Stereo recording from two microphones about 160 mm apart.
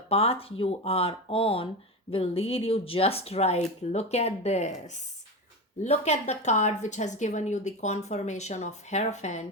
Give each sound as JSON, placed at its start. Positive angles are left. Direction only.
{"t": 0.1, "sound": "speech", "side_deg": 40}
{"t": 5.8, "sound": "a woman's voice", "side_deg": 45}